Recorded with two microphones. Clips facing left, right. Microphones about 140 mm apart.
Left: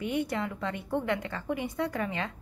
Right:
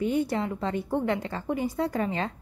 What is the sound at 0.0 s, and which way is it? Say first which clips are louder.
A woman's voice: right 4 dB; 35° right (ahead or behind).